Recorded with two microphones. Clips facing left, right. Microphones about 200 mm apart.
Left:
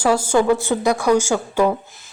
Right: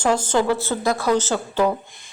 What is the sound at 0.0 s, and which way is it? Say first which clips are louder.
A woman's voice: left 3 dB; 10° left (ahead or behind).